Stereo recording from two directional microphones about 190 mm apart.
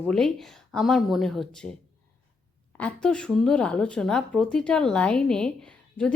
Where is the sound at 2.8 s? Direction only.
5° left (ahead or behind).